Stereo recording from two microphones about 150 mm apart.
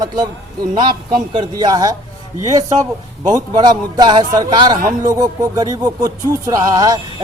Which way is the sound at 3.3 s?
25° right (ahead or behind).